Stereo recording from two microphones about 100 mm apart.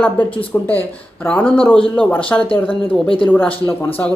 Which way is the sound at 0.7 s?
20° left (ahead or behind).